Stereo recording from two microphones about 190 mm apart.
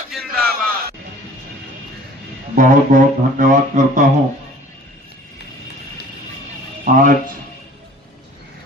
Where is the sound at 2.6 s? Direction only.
45° right (ahead or behind).